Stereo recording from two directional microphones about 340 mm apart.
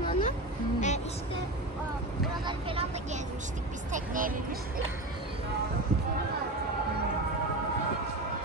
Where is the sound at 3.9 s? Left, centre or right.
Right.